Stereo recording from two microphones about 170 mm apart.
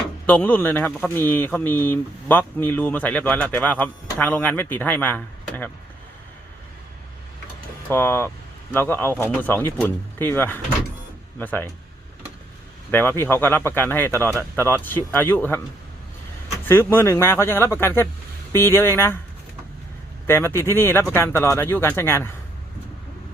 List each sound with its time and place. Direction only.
0.3 s speech: 10° left (ahead or behind)
7.9 s speech: 10° left (ahead or behind)
12.9 s speech: 15° left (ahead or behind)
16.6 s speech: 15° left (ahead or behind)
20.2 s speech: 15° left (ahead or behind)